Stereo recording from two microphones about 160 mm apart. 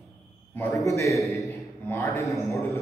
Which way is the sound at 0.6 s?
20° left (ahead or behind).